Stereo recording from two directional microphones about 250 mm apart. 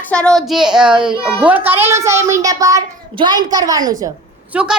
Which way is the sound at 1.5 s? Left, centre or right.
Centre.